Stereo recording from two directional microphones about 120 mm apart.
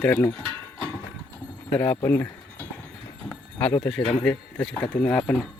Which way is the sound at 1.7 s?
15° left (ahead or behind).